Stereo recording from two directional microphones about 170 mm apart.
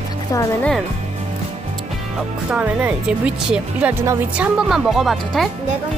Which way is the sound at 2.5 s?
5° right (ahead or behind).